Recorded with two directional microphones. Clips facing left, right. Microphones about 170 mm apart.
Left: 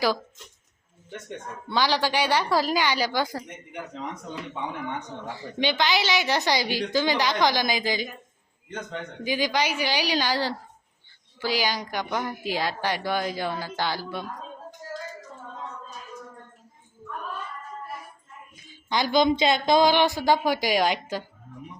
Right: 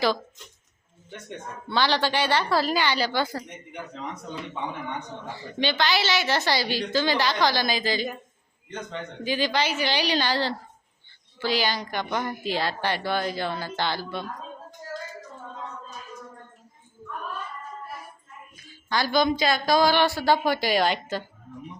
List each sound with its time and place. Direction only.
1.7 s a woman's voice: 10° left (ahead or behind)
5.3 s a woman's voice: 15° left (ahead or behind)
18.5 s a woman's voice: 20° left (ahead or behind)